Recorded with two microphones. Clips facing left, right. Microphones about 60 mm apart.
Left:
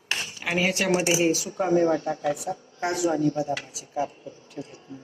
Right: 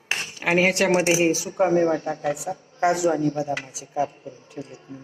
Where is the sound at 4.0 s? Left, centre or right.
Right.